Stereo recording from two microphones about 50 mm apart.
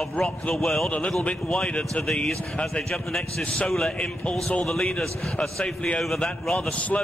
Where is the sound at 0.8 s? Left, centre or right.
Centre.